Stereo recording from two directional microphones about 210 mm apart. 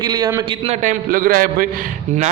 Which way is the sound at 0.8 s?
40° right (ahead or behind).